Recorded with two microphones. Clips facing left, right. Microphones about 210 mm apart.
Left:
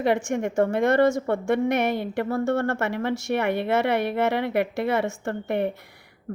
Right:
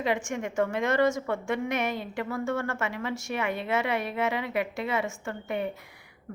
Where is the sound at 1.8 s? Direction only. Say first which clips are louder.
Left 6 dB; 65° left (ahead or behind).